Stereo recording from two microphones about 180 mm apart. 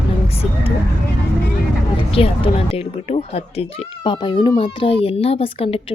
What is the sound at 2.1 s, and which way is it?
A child's voice, 30° left (ahead or behind).